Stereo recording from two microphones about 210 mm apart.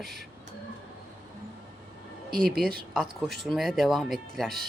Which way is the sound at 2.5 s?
45° right (ahead or behind).